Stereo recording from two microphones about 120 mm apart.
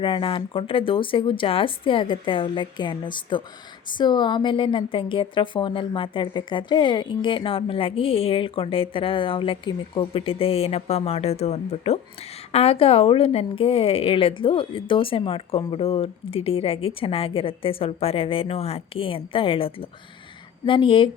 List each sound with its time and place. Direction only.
0.0 s a woman's voice: 45° left (ahead or behind)